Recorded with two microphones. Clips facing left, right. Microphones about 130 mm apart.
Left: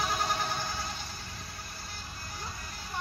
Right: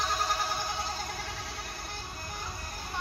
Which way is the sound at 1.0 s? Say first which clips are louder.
Right 6 dB; 75° right (ahead or behind).